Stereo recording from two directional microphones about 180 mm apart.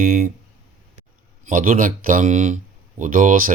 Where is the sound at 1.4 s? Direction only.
50° right (ahead or behind).